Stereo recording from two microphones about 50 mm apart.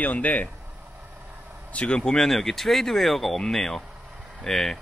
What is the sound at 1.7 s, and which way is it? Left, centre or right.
A man's voice, left.